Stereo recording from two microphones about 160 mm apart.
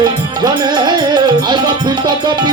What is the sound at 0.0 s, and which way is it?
Music, 25° right (ahead or behind).